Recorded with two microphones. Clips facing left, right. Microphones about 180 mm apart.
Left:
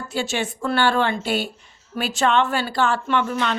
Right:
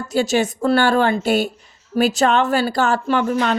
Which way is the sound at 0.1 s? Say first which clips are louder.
Right 8 dB; 40° right (ahead or behind).